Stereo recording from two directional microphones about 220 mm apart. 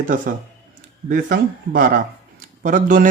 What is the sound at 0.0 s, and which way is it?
A man's voice, 35° right (ahead or behind).